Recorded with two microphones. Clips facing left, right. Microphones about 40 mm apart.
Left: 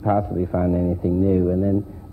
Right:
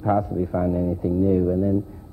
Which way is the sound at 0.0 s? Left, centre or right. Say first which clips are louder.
Left 1 dB; centre.